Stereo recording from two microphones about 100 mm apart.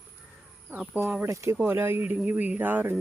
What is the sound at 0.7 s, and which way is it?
Speech, 15° right (ahead or behind).